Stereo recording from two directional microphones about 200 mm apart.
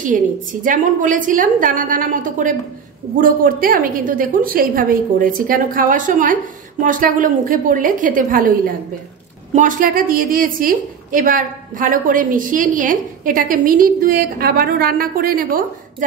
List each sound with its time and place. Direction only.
0.0 s a woman's voice: 40° right (ahead or behind)